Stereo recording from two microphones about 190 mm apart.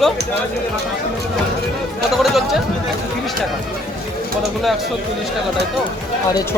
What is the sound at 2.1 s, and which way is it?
Speech, centre (ahead or behind).